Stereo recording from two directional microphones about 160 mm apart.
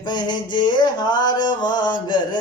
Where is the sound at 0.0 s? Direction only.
25° left (ahead or behind).